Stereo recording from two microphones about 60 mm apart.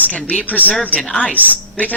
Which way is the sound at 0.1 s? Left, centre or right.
Left.